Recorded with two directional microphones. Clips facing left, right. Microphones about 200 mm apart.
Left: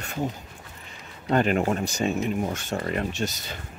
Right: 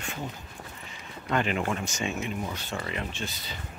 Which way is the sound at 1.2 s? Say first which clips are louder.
Left 6 dB; 40° left (ahead or behind).